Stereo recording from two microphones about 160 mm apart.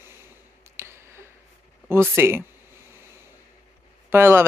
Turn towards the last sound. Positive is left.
turn(degrees=-15)  # may be behind; listen again after turning